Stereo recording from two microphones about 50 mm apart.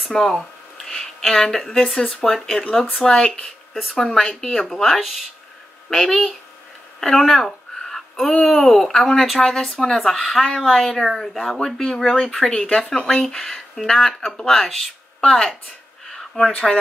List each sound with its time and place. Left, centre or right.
0.1 s a woman's voice: centre
11.1 s speech: centre
12.5 s speech: left
16.6 s speech: centre